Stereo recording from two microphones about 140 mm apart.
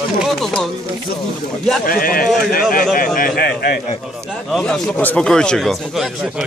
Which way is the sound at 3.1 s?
90° left.